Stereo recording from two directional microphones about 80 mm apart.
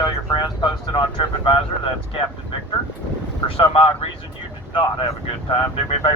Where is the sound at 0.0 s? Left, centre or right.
Left.